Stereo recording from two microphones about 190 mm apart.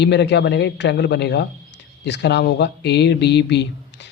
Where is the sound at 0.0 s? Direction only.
65° left (ahead or behind).